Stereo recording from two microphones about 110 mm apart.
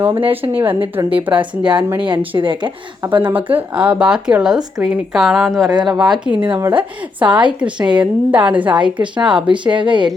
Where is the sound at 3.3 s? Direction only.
15° right (ahead or behind).